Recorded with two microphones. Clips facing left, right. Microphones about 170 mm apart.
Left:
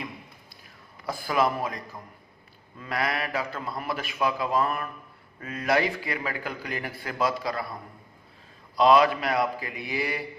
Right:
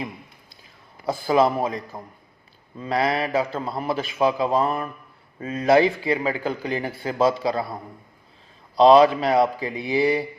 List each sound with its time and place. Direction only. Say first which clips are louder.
1.0 s speech: right 6 dB; 25° right (ahead or behind)
8.7 s speech: right 6 dB; 25° right (ahead or behind)